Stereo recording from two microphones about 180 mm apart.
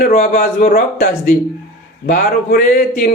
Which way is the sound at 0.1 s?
40° left (ahead or behind).